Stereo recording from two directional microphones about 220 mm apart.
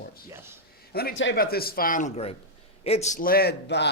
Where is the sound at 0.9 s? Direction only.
45° left (ahead or behind).